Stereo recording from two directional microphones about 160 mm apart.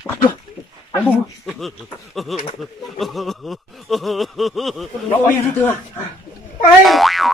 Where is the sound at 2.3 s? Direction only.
Centre (ahead or behind).